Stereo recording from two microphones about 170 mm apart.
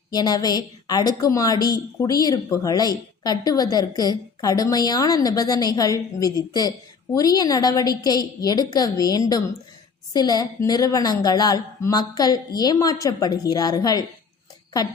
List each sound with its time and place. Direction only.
0.1 s a woman's voice: 25° left (ahead or behind)